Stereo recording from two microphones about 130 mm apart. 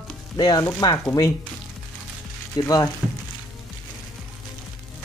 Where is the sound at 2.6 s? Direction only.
30° left (ahead or behind).